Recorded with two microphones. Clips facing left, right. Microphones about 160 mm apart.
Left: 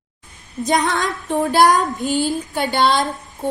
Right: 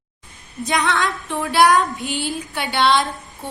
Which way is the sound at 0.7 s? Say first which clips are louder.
Left 2 dB; 45° left (ahead or behind).